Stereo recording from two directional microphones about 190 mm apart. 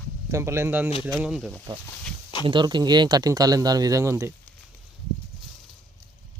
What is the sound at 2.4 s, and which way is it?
Speech, 25° right (ahead or behind).